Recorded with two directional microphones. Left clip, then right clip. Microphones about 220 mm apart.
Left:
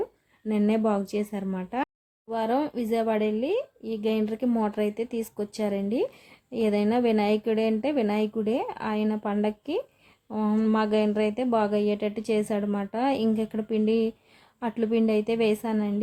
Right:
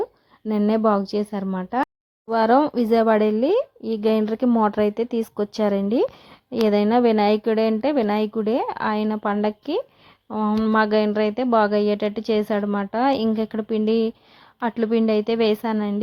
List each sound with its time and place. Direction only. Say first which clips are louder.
0.0 s a woman's voice: right 5 dB; 20° right (ahead or behind)